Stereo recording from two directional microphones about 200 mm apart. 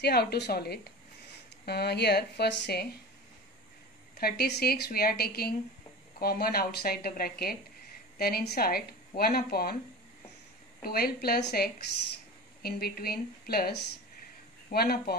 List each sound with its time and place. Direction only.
0.0 s a woman's voice: 55° left (ahead or behind)
4.2 s speech: 50° left (ahead or behind)
10.8 s speech: 50° left (ahead or behind)